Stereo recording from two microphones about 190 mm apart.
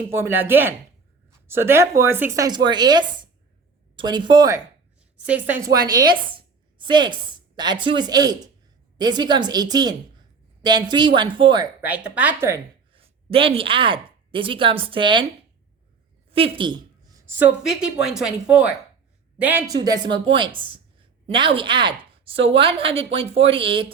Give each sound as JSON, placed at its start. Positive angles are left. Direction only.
{"t": 0.1, "sound": "speech", "side_deg": -10}
{"t": 5.2, "sound": "a woman's voice", "side_deg": -10}
{"t": 11.8, "sound": "speech", "side_deg": -5}
{"t": 12.9, "sound": "a woman's voice", "side_deg": -30}
{"t": 16.3, "sound": "a woman's voice", "side_deg": -25}